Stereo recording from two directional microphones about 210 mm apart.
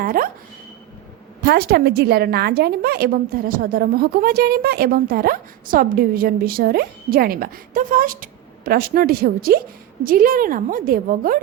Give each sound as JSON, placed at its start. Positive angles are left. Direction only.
{"t": 0.0, "sound": "speech", "side_deg": -45}
{"t": 1.5, "sound": "a woman's voice", "side_deg": -50}